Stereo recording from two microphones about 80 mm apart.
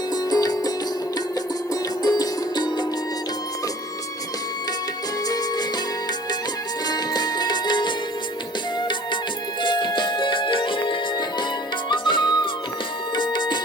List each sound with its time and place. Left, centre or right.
0.1 s music: left
2.0 s music: left
6.8 s music: left
9.6 s music: left